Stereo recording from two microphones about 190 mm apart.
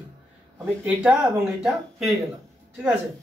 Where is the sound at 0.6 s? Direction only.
10° right (ahead or behind).